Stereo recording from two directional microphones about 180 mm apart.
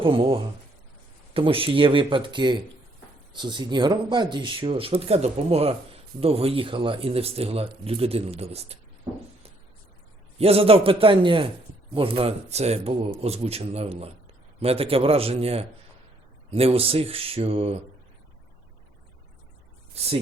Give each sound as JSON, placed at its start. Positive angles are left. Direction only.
{"t": 0.0, "sound": "speech", "side_deg": -30}
{"t": 9.1, "sound": "speech", "side_deg": -20}
{"t": 10.3, "sound": "speech", "side_deg": -35}